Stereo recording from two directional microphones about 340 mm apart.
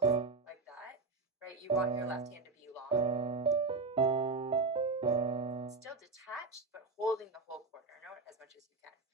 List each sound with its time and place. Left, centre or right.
0.0 s music: centre
1.6 s piano: centre
6.9 s a sound: centre